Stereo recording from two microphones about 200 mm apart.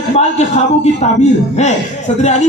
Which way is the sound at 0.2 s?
35° left (ahead or behind).